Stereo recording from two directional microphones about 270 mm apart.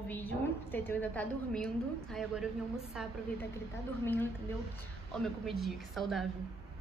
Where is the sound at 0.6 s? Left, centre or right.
Centre.